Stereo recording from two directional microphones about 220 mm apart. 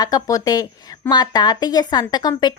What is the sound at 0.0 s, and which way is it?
Speech, 15° left (ahead or behind).